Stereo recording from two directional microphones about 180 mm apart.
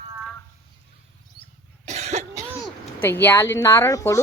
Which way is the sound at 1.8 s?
40° right (ahead or behind).